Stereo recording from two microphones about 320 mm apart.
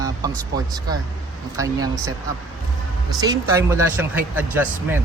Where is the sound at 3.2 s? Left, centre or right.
Centre.